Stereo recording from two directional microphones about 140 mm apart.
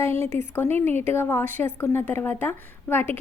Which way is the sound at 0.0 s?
15° left (ahead or behind).